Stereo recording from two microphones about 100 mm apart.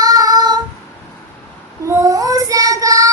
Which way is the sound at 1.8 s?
35° right (ahead or behind).